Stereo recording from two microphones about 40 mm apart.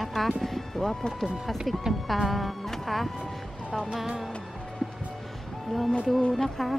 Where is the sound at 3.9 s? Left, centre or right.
Centre.